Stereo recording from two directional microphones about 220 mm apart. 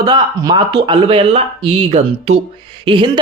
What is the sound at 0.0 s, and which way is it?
A man's voice, 20° right (ahead or behind).